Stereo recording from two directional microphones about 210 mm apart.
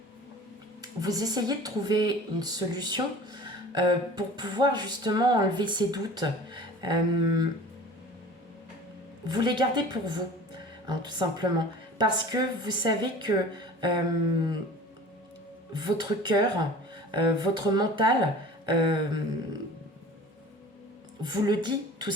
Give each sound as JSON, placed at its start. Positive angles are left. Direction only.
{"t": 0.8, "sound": "speech", "side_deg": -20}
{"t": 9.2, "sound": "speech", "side_deg": -20}
{"t": 15.7, "sound": "speech", "side_deg": -20}
{"t": 21.2, "sound": "a woman's voice", "side_deg": -20}